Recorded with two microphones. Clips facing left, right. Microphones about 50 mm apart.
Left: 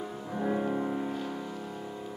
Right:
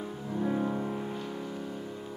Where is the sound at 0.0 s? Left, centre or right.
Centre.